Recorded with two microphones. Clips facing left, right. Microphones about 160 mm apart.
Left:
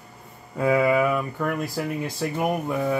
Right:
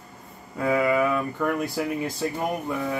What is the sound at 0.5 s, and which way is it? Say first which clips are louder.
Speech: left 2 dB; 15° left (ahead or behind).